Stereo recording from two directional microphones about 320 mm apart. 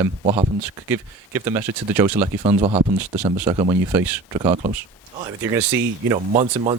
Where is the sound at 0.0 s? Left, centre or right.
Centre.